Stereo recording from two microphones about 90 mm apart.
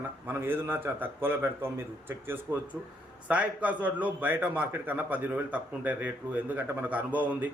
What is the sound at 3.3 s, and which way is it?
A man's voice, 15° right (ahead or behind).